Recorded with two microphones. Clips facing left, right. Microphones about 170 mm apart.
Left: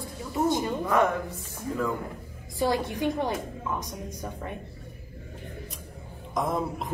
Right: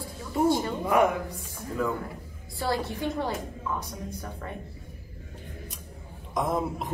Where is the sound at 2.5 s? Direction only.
15° left (ahead or behind).